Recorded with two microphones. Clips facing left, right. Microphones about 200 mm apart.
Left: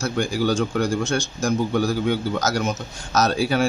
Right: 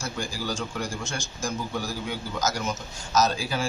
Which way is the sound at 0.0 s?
65° left (ahead or behind).